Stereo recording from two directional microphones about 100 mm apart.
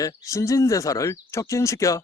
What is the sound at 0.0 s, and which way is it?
Speech, 30° left (ahead or behind).